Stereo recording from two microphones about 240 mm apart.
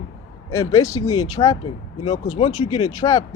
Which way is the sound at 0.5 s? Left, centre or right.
Centre.